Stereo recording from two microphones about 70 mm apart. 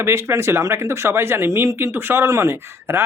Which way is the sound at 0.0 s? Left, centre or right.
Right.